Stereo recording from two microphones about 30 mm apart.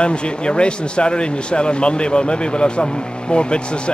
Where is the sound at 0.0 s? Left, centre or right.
Left.